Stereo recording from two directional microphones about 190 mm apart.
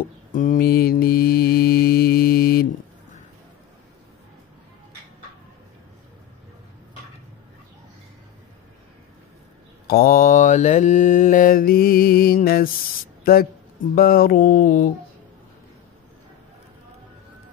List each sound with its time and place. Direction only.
0.3 s mantra: 45° left (ahead or behind)
9.8 s mantra: 50° left (ahead or behind)
13.2 s speech: 50° left (ahead or behind)
13.9 s mantra: 50° left (ahead or behind)